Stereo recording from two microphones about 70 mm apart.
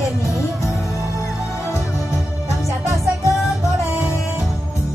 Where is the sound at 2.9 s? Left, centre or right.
Left.